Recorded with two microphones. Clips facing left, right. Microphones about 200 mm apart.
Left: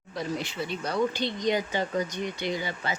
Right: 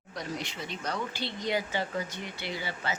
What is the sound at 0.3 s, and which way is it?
Speech, 5° left (ahead or behind).